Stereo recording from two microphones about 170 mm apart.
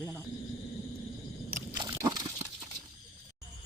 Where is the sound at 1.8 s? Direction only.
25° right (ahead or behind).